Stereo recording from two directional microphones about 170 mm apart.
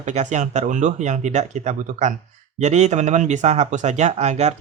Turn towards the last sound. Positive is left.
turn(degrees=-40)  # may be behind; listen again after turning